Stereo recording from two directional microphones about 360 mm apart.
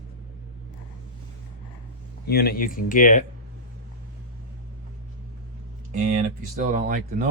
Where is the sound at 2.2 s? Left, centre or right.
Left.